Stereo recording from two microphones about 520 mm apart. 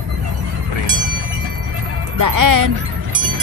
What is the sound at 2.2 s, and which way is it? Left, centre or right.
Music, right.